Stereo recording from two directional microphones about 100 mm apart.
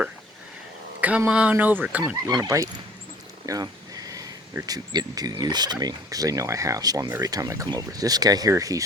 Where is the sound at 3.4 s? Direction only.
40° right (ahead or behind).